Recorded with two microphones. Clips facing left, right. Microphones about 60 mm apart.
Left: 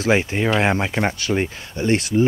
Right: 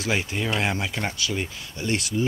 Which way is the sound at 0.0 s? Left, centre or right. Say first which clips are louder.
Left 7 dB; left.